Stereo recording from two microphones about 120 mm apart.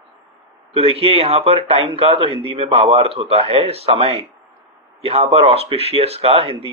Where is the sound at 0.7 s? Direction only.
55° right (ahead or behind).